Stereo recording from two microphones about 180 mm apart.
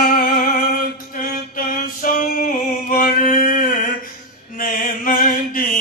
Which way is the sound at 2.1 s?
50° left (ahead or behind).